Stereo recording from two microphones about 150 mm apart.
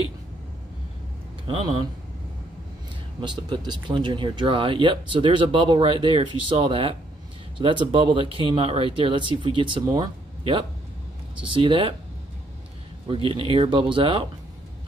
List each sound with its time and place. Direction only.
1.5 s speech: 40° right (ahead or behind)
3.2 s speech: 30° right (ahead or behind)
13.1 s speech: 35° right (ahead or behind)